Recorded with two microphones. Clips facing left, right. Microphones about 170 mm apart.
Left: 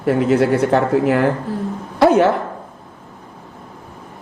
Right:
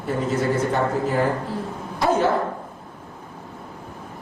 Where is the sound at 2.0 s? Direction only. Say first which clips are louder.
Left 8 dB; 70° left (ahead or behind).